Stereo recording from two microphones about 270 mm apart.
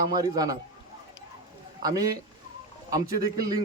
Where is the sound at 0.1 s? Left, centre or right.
Centre.